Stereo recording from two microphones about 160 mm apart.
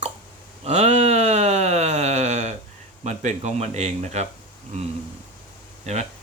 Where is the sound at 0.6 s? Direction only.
45° right (ahead or behind).